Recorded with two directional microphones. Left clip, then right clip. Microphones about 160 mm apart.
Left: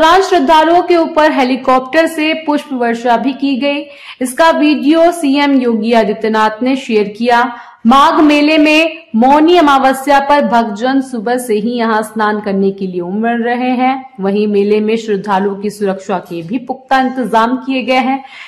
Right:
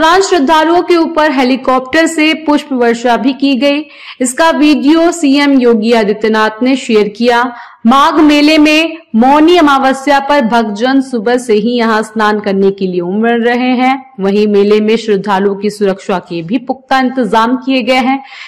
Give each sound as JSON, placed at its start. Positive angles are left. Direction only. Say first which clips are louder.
{"t": 0.0, "sound": "a woman's voice", "louder": "even", "side_deg": -15}